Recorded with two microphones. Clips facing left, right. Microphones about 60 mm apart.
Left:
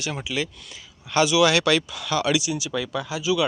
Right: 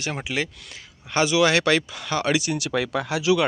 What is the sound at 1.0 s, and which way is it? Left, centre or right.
Speech, right.